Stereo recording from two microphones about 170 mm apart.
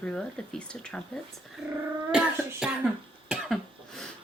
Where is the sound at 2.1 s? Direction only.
5° right (ahead or behind).